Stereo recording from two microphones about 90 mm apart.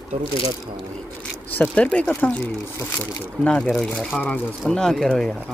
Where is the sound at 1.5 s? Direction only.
15° left (ahead or behind).